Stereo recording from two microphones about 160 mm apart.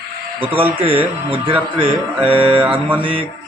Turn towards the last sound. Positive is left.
turn(degrees=-10)  # may be behind; listen again after turning